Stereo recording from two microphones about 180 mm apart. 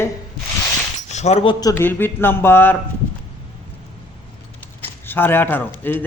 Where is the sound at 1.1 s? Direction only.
40° left (ahead or behind).